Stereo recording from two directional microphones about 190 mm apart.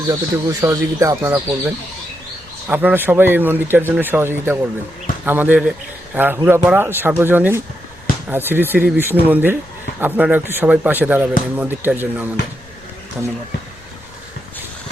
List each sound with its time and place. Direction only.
0.1 s speech: 15° right (ahead or behind)